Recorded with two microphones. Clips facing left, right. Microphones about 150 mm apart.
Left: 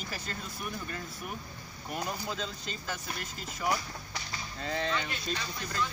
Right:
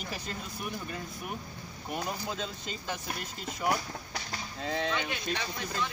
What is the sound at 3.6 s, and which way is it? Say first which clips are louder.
Speech: right 1 dB; 60° right (ahead or behind).